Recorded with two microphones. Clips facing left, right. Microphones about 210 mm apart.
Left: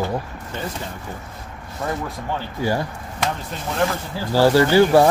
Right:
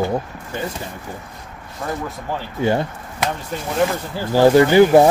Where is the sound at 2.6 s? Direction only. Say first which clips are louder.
Right 4 dB; 25° right (ahead or behind).